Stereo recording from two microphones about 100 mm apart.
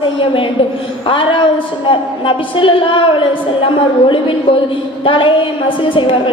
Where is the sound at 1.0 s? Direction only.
60° left (ahead or behind).